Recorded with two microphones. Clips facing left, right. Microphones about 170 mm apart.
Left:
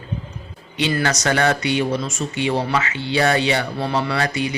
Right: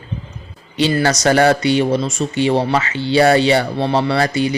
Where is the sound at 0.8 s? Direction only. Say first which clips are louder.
Right 5 dB; 35° right (ahead or behind).